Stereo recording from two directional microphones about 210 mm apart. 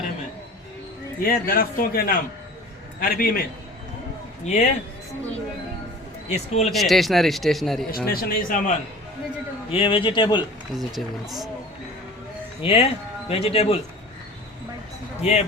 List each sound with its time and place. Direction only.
1.2 s speech: 45° left (ahead or behind)
4.4 s speech: 35° left (ahead or behind)
6.2 s speech: 30° left (ahead or behind)
6.7 s a man's voice: centre (ahead or behind)
7.9 s speech: 45° left (ahead or behind)
9.7 s speech: 25° left (ahead or behind)
10.8 s a man's voice: centre (ahead or behind)
12.6 s speech: 25° left (ahead or behind)
15.2 s speech: 30° left (ahead or behind)